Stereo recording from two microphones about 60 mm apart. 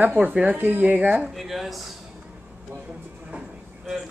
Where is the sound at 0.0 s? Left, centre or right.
Right.